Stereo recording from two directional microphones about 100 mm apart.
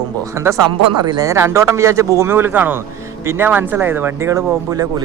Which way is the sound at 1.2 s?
30° right (ahead or behind).